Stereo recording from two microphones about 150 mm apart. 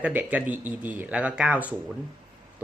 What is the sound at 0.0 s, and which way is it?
Speech, 10° right (ahead or behind).